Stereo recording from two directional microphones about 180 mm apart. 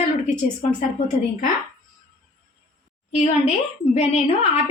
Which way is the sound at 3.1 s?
35° left (ahead or behind).